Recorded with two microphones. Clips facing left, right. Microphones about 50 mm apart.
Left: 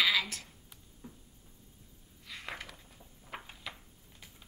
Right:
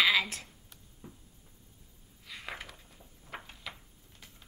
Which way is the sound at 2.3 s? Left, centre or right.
Centre.